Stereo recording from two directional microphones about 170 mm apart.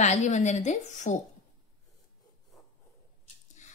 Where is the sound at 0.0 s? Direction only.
45° left (ahead or behind).